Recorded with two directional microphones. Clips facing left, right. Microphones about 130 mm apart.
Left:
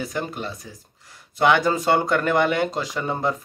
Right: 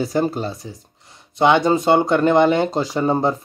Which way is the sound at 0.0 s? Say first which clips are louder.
Right 8 dB; 30° right (ahead or behind).